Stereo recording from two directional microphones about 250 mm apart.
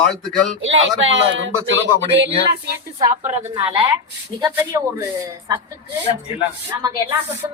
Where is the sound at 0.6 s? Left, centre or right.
Right.